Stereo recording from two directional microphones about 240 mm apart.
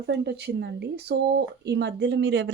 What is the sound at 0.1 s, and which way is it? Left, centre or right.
A woman's voice, right.